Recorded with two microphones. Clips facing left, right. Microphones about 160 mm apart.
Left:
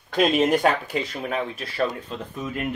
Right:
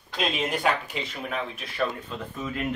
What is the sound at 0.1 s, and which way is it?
Speech, 50° left (ahead or behind).